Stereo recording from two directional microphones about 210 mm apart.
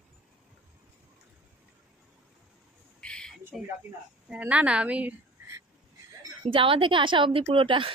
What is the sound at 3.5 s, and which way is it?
A woman's voice, centre (ahead or behind).